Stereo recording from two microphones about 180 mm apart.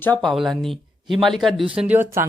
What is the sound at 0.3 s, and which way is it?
Speech, centre (ahead or behind).